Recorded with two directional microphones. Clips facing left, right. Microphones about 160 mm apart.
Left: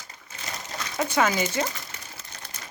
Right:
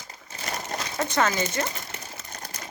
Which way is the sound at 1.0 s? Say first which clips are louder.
Left 1 dB; 10° left (ahead or behind).